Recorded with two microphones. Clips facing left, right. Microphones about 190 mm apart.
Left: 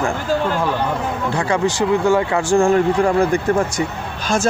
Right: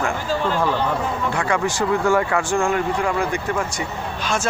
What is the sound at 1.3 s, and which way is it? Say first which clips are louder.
Speech: left 4 dB; 35° left (ahead or behind).